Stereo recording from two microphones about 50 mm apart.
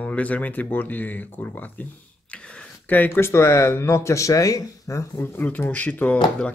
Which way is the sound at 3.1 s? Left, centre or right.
Left.